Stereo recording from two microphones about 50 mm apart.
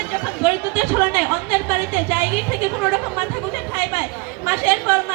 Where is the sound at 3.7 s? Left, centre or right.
Right.